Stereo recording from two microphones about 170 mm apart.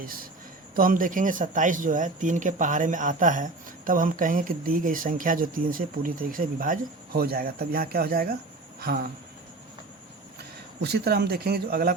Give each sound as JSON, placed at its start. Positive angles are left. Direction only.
{"t": 0.0, "sound": "speech", "side_deg": -55}
{"t": 10.8, "sound": "speech", "side_deg": -70}